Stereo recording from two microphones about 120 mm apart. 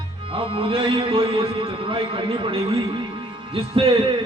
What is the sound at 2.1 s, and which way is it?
A man's voice, 50° right (ahead or behind).